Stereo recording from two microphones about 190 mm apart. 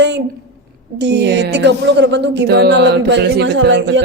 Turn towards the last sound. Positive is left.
turn(degrees=-70)  # may be behind; listen again after turning